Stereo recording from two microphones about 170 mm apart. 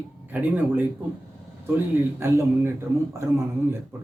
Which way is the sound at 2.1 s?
15° right (ahead or behind).